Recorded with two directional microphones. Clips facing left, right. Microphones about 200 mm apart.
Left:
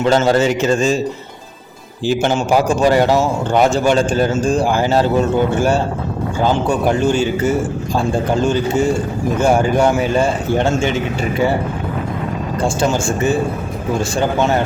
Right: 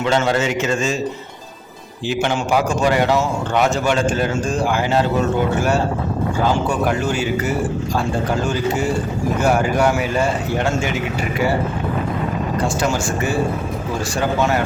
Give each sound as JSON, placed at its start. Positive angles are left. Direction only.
{"t": 0.0, "sound": "a man's voice", "side_deg": 40}
{"t": 2.0, "sound": "a man's voice", "side_deg": 40}
{"t": 6.8, "sound": "speech", "side_deg": 30}
{"t": 12.6, "sound": "speech", "side_deg": 25}